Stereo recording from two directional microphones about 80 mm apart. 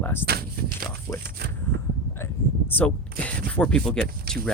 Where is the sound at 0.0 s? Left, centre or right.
Left.